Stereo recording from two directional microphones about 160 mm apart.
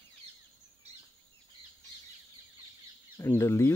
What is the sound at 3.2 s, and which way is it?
Speech, 15° left (ahead or behind).